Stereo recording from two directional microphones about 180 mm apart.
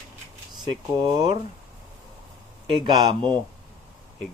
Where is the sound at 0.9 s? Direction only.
25° right (ahead or behind).